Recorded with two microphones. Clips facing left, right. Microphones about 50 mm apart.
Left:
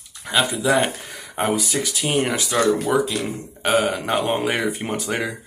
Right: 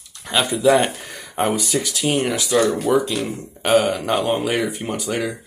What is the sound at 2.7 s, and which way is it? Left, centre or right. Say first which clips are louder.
A man's voice: right 1 dB; centre.